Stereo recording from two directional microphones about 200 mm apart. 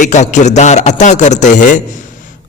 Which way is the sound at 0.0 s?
35° left (ahead or behind).